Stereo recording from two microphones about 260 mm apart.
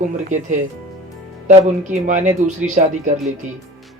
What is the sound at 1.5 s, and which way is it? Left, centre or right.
Speech, right.